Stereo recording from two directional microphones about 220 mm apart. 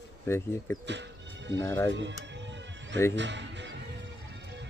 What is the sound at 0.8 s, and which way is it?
Music, 55° right (ahead or behind).